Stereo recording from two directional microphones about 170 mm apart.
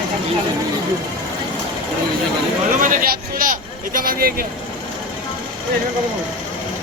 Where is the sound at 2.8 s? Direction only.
55° right (ahead or behind).